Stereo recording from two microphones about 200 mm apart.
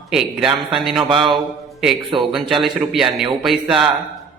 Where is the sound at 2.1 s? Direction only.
25° right (ahead or behind).